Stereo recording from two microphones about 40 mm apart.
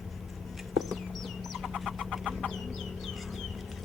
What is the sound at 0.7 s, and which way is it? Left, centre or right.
Chicken, centre.